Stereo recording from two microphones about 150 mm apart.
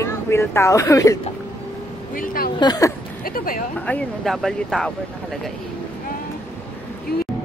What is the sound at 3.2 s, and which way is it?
Speech, 70° left (ahead or behind).